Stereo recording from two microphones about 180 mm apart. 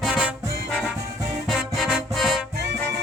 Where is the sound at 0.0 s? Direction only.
5° right (ahead or behind).